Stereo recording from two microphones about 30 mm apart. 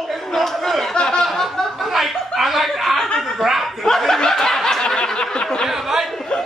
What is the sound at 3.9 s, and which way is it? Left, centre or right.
Snicker, centre.